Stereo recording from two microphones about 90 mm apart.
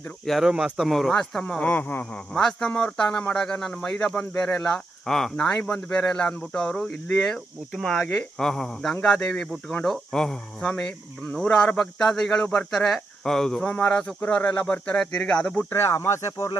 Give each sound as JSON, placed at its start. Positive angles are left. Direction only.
{"t": 0.3, "sound": "speech", "side_deg": -5}
{"t": 15.7, "sound": "speech", "side_deg": 30}